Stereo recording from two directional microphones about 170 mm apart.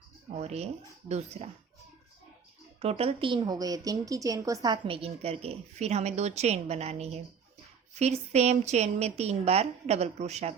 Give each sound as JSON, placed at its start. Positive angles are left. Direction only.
{"t": 0.3, "sound": "a woman's voice", "side_deg": -40}
{"t": 2.8, "sound": "a woman's voice", "side_deg": -35}